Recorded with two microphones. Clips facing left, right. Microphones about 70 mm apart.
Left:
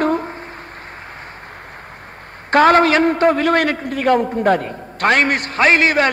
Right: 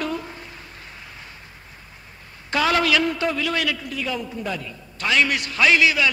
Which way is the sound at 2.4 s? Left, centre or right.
Left.